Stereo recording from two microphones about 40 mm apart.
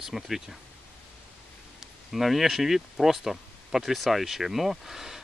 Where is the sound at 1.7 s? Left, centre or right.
Centre.